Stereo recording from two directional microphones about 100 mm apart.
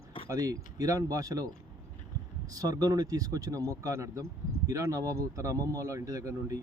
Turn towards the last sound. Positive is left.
turn(degrees=-35)  # may be behind; listen again after turning